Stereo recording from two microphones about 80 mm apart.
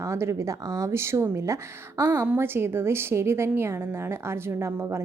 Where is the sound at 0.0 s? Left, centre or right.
Right.